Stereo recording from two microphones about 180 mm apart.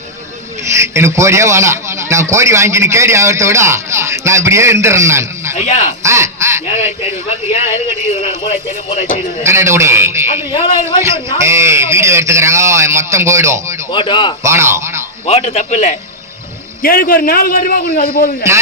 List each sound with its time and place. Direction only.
0.7 s a man's voice: 15° right (ahead or behind)
5.6 s speech: 40° left (ahead or behind)
6.0 s duck: 15° right (ahead or behind)
8.9 s speech: 40° left (ahead or behind)
9.4 s a man's voice: 15° right (ahead or behind)
13.9 s a man's voice: 25° left (ahead or behind)
14.4 s speech: 15° right (ahead or behind)
15.3 s speech: 35° left (ahead or behind)
16.8 s a man's voice: 55° left (ahead or behind)